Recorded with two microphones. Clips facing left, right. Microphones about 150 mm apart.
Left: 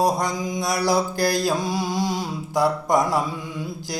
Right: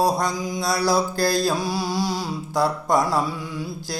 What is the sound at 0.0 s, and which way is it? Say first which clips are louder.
Mantra: even; 20° left (ahead or behind).